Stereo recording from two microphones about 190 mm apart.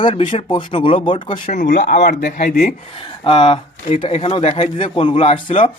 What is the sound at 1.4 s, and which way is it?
Speech, 40° left (ahead or behind).